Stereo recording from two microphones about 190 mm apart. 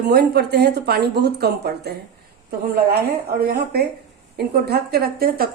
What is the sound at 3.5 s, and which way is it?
A woman's voice, 55° right (ahead or behind).